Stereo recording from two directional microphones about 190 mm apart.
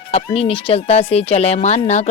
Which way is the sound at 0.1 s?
30° left (ahead or behind).